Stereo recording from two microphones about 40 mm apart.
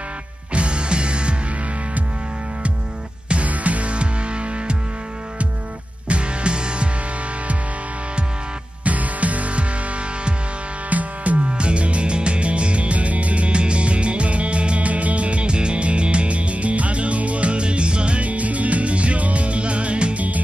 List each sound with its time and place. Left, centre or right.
0.5 s music: right
3.3 s music: right
6.0 s music: right
8.8 s music: right
10.9 s music: right